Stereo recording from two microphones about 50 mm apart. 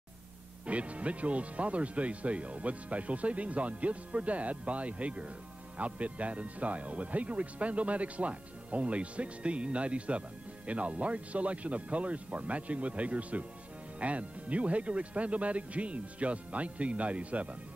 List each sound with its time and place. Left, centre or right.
0.7 s speech: right